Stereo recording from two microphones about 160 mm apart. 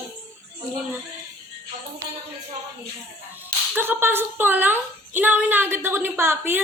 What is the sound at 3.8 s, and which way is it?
A woman's voice, 15° right (ahead or behind).